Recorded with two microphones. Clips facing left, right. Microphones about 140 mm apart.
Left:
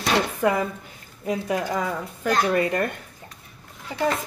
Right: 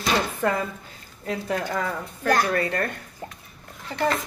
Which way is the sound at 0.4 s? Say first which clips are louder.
Left 3 dB; 15° left (ahead or behind).